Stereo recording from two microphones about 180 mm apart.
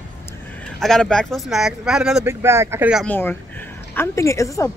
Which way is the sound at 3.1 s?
10° left (ahead or behind).